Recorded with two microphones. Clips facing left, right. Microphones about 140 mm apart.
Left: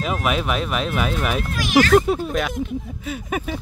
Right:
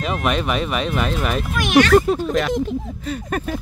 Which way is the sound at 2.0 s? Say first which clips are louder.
Right 2 dB; 5° left (ahead or behind).